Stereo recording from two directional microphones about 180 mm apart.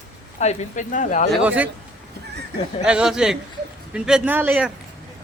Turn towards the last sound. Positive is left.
turn(degrees=-5)  # may be behind; listen again after turning